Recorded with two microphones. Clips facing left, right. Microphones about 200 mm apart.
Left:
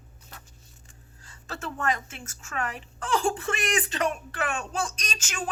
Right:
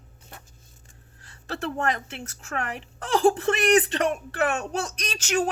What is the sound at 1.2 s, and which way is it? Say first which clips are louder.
A woman's voice: right 6 dB; 65° right (ahead or behind).